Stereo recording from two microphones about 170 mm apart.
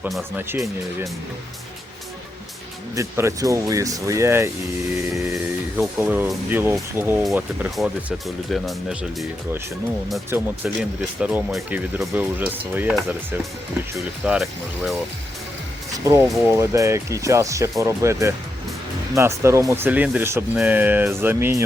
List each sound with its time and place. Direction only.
0.0 s speech: centre (ahead or behind)
0.3 s speech: 15° right (ahead or behind)
2.9 s speech: 15° right (ahead or behind); by 9.0 s centre (ahead or behind)
10.2 s speech: 10° right (ahead or behind)
15.9 s speech: 20° right (ahead or behind)
16.2 s speech: centre (ahead or behind)
16.5 s speech: 15° right (ahead or behind)